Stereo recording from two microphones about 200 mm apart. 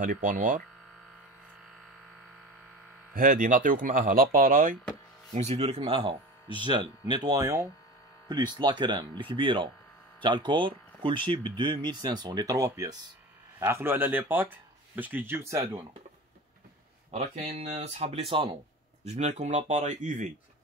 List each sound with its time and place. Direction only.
0.3 s speech: 40° right (ahead or behind)
3.2 s speech: 45° right (ahead or behind); by 15.8 s 15° right (ahead or behind)
17.1 s speech: 35° right (ahead or behind)